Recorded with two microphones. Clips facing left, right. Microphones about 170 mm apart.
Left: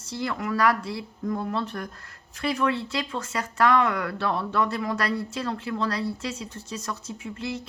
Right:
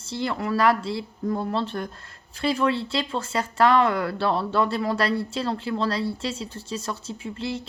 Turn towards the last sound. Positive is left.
turn(degrees=-30)  # may be behind; listen again after turning